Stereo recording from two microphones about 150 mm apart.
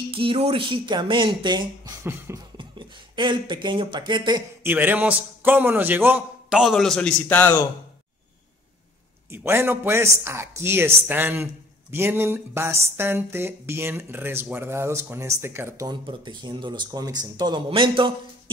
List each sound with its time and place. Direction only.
0.1 s speech: 35° right (ahead or behind)
2.0 s speech: 15° right (ahead or behind)
2.5 s speech: 30° right (ahead or behind)
4.6 s speech: 10° right (ahead or behind); by 7.6 s 10° left (ahead or behind)
9.3 s speech: 15° right (ahead or behind)
15.9 s speech: 30° right (ahead or behind)